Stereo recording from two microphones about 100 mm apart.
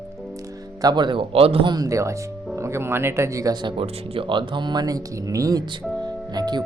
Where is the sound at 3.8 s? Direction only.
65° right (ahead or behind); by 6.6 s 45° right (ahead or behind).